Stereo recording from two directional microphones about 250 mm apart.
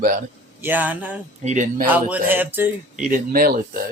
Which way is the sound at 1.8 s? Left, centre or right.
Centre.